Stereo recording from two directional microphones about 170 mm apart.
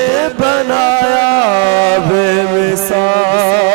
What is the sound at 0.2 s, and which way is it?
Music, 10° left (ahead or behind).